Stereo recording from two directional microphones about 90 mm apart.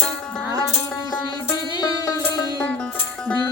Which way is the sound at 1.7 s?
45° left (ahead or behind).